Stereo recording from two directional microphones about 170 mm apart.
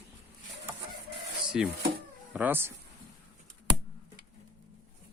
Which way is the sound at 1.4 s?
5° right (ahead or behind).